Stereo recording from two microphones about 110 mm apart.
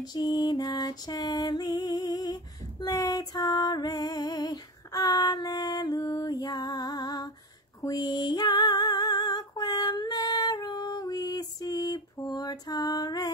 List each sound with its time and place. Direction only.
0.0 s music: 40° left (ahead or behind)
7.8 s female singing: 35° left (ahead or behind)